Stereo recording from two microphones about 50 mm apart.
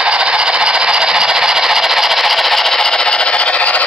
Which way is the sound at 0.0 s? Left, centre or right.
Centre.